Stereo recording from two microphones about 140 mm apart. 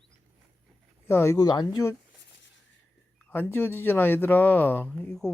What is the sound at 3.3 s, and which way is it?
Speech, 15° left (ahead or behind).